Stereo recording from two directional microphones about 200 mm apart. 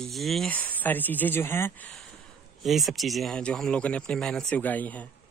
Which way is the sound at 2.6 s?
Centre (ahead or behind).